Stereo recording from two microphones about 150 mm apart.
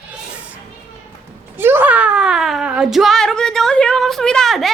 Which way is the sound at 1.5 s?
15° right (ahead or behind).